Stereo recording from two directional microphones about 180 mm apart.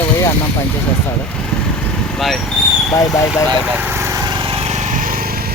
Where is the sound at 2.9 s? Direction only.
15° left (ahead or behind).